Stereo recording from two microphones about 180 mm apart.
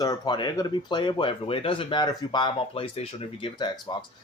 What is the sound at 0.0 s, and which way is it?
Speech, 25° left (ahead or behind).